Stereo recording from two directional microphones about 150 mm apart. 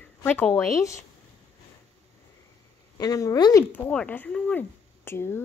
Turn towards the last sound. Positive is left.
turn(degrees=15)  # may be behind; listen again after turning